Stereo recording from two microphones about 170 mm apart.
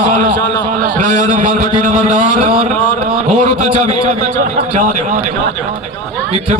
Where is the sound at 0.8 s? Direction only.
50° right (ahead or behind).